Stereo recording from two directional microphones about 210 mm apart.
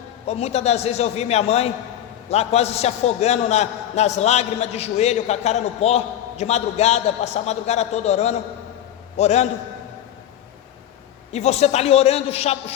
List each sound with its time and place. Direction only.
0.3 s a man's voice: 30° left (ahead or behind)
11.3 s a man's voice: 30° left (ahead or behind)